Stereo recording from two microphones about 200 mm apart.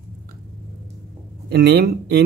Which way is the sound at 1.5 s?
55° right (ahead or behind).